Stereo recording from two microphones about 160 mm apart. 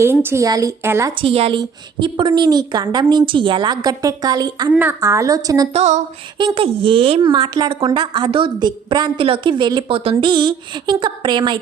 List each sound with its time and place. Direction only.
0.0 s a woman's voice: 15° right (ahead or behind)
1.2 s a woman's voice: 35° right (ahead or behind)
4.7 s a woman's voice: 10° right (ahead or behind)
5.7 s female singing: 45° right (ahead or behind)
6.4 s a woman's voice: 35° right (ahead or behind)